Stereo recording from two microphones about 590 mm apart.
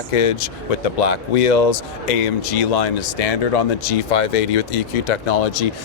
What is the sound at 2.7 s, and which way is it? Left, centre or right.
Speech, left.